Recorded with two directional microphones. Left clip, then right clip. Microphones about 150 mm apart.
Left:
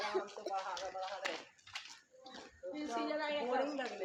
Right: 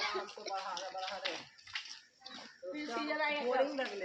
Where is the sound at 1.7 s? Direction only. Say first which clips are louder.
Right 5 dB; 15° left (ahead or behind).